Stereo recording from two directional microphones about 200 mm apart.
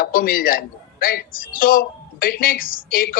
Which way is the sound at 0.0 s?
45° left (ahead or behind).